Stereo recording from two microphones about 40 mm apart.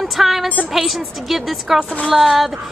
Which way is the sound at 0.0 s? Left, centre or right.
Centre.